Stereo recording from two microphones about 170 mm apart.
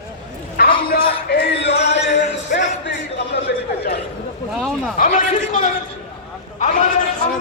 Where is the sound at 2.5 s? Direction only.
90° left.